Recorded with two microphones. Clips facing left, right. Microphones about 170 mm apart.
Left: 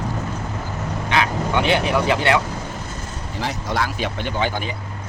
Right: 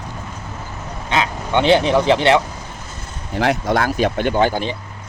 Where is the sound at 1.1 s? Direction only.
25° right (ahead or behind).